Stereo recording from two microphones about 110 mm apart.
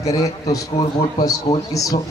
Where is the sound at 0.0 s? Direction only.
30° left (ahead or behind).